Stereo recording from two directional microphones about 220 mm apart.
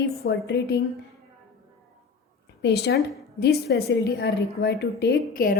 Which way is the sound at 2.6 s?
50° left (ahead or behind).